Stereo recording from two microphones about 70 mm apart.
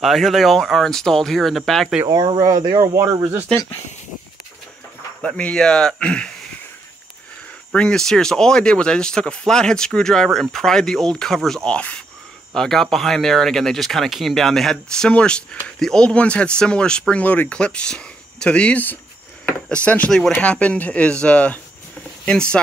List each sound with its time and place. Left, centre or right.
0.0 s speech: centre
2.0 s speech: right
5.2 s speech: centre
7.7 s speech: centre
12.5 s speech: centre
20.1 s speech: centre
20.4 s speech: centre